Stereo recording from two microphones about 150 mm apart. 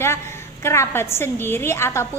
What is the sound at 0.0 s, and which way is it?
A woman's voice, 15° left (ahead or behind).